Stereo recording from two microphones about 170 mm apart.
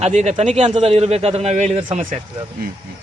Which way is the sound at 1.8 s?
30° right (ahead or behind).